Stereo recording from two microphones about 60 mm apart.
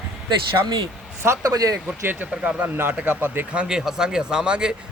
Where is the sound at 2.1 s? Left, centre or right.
Right.